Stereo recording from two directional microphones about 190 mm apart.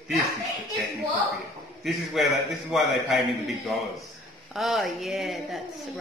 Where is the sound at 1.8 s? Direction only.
Centre (ahead or behind).